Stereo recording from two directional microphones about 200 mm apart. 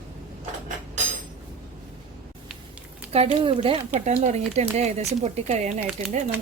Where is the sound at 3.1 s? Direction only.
30° right (ahead or behind).